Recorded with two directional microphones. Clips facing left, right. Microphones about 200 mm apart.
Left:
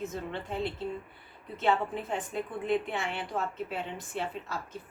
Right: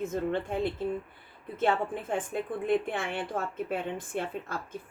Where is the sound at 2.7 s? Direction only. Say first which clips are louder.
Right 2 dB; 50° right (ahead or behind).